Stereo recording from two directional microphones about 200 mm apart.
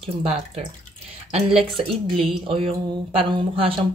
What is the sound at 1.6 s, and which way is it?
Speech, 30° right (ahead or behind).